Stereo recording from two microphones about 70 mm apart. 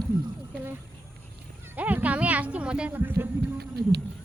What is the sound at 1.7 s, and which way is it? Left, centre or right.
Speech, right.